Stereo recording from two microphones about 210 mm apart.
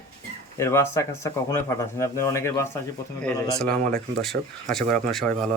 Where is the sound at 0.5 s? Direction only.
15° left (ahead or behind).